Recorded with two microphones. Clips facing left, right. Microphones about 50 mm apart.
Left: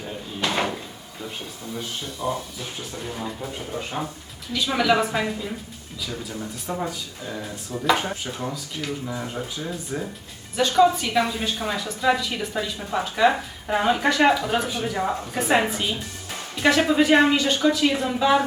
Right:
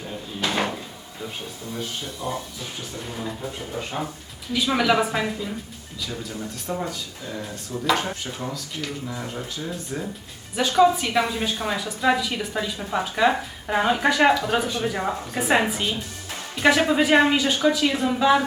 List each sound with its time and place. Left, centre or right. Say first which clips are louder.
0.3 s drawer open or close: even; centre
2.2 s a woman's voice: left 4 dB; centre
10.5 s a woman's voice: even; centre